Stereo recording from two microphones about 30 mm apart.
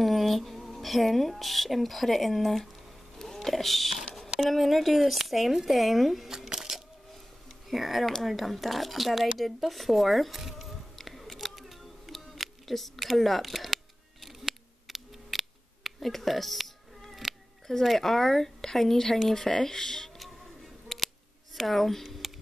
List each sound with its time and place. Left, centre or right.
0.0 s speech: centre
3.2 s a sound: centre
3.4 s speech: centre
6.5 s a sound: centre
7.4 s a sound: centre
8.2 s speech: centre
11.0 s camera: centre
11.3 s a sound: centre
16.1 s music: centre
17.6 s speech: centre
20.9 s scissors: centre
21.5 s speech: centre